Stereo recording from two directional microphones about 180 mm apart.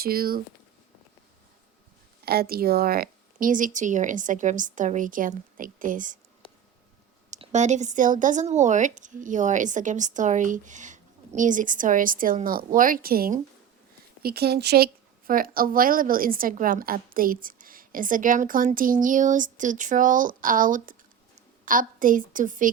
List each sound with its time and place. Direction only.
0.0 s speech: 55° right (ahead or behind)
2.2 s speech: 60° right (ahead or behind)
7.3 s speech: 40° right (ahead or behind); by 14.8 s 65° right (ahead or behind)
15.3 s speech: 50° right (ahead or behind)